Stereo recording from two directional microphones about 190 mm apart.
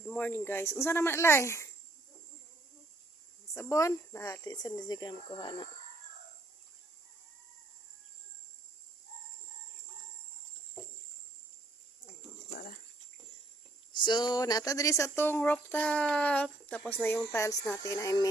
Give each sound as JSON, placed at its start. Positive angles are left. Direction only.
{"t": 0.0, "sound": "speech", "side_deg": 5}
{"t": 3.5, "sound": "speech", "side_deg": 15}
{"t": 12.5, "sound": "dog", "side_deg": 50}
{"t": 13.9, "sound": "speech", "side_deg": 25}